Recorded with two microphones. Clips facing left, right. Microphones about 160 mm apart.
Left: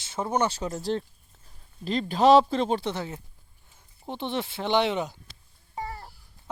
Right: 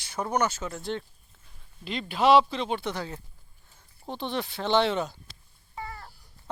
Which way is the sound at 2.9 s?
20° left (ahead or behind).